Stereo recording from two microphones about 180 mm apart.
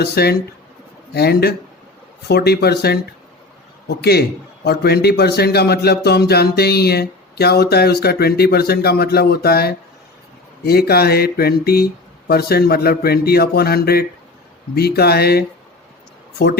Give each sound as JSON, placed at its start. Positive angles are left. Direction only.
{"t": 0.0, "sound": "a man's voice", "side_deg": 65}